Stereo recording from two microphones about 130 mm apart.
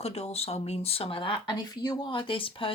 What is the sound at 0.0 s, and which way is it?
Speech, 50° left (ahead or behind).